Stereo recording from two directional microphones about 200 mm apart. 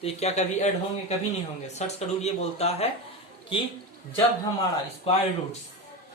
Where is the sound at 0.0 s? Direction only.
30° left (ahead or behind).